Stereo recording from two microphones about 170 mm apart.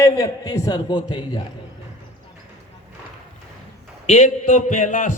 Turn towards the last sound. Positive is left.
turn(degrees=50)  # may be behind; listen again after turning